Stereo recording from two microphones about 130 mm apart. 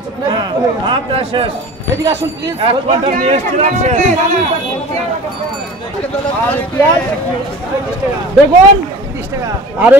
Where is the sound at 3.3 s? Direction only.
60° right (ahead or behind).